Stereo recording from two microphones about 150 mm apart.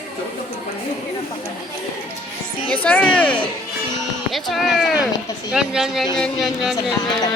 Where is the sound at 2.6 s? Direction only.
10° left (ahead or behind).